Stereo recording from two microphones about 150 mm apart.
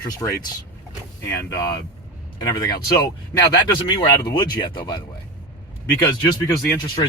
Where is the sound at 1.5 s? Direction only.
25° left (ahead or behind).